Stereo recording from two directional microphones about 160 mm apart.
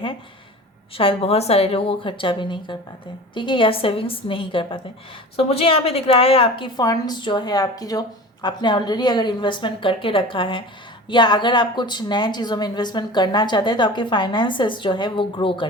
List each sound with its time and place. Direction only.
0.9 s a woman's voice: 35° left (ahead or behind)